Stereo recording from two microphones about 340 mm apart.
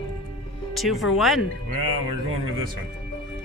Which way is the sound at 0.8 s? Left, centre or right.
Centre.